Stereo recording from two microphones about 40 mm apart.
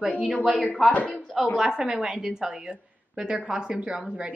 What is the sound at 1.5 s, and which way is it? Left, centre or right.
A woman's voice, centre.